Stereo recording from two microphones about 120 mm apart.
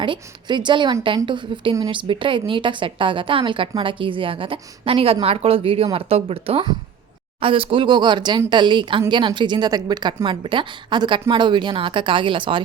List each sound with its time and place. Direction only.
0.0 s a woman's voice: 40° right (ahead or behind)